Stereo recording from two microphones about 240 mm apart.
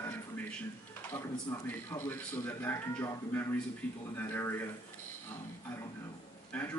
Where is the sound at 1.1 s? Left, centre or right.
Centre.